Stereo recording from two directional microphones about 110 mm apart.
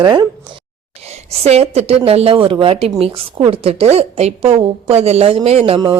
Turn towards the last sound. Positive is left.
turn(degrees=-70)  # may be behind; listen again after turning